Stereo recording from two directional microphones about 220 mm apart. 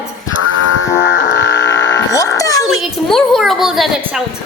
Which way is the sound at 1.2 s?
55° left (ahead or behind).